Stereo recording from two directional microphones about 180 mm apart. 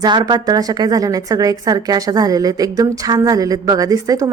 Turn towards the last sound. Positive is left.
turn(degrees=-20)  # may be behind; listen again after turning